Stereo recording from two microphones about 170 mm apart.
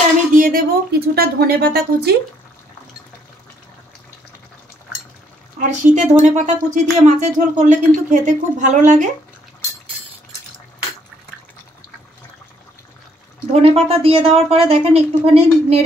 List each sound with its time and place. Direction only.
0.3 s speech: 55° right (ahead or behind)
5.6 s speech: 45° right (ahead or behind)
13.5 s a woman's voice: 35° right (ahead or behind)